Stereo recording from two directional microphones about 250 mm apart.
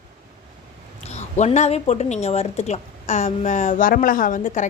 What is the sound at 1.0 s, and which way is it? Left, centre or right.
A woman's voice, left.